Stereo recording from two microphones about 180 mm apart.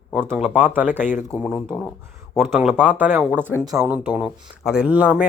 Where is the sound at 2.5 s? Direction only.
5° right (ahead or behind).